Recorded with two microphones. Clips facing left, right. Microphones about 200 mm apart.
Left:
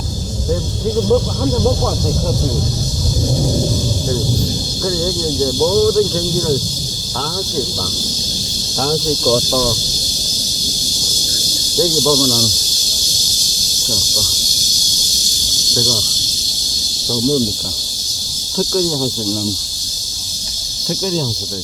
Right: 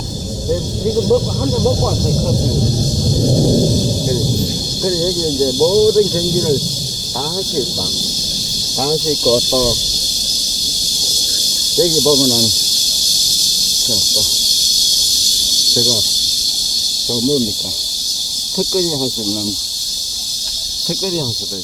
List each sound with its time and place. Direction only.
1.0 s speech: 5° right (ahead or behind)
4.8 s speech: 20° right (ahead or behind)
8.8 s speech: 10° right (ahead or behind)
11.8 s speech: 15° right (ahead or behind)
15.7 s speech: 20° right (ahead or behind)
17.1 s speech: 10° right (ahead or behind)
18.5 s speech: 10° right (ahead or behind)
21.0 s speech: 5° right (ahead or behind)